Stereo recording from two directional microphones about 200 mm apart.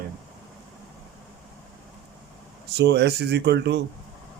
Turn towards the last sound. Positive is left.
turn(degrees=-60)  # may be behind; listen again after turning